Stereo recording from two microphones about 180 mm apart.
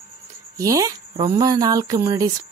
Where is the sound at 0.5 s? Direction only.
20° right (ahead or behind).